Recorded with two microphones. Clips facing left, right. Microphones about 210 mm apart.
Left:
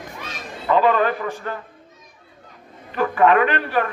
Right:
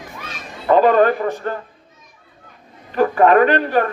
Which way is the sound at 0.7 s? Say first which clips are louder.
Right 5 dB; 45° right (ahead or behind).